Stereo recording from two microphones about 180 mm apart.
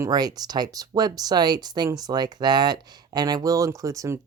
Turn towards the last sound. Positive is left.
turn(degrees=-15)  # may be behind; listen again after turning